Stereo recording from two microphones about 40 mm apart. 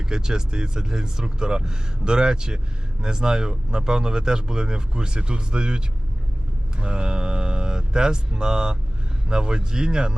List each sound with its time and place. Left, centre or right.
0.0 s speech: centre